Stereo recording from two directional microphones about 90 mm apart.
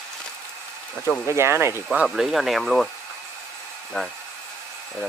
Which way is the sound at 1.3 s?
30° right (ahead or behind).